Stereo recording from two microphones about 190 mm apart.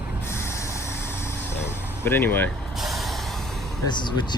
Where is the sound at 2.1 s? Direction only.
10° left (ahead or behind).